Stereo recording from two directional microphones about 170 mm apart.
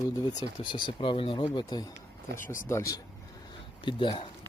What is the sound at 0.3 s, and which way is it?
Speech, 25° left (ahead or behind).